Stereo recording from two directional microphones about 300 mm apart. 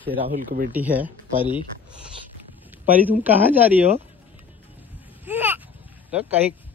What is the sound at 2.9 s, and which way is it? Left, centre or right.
Speech, centre.